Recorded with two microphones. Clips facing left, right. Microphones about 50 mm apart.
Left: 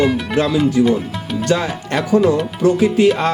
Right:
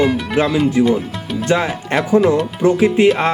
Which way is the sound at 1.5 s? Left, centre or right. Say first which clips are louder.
Right 2 dB; right.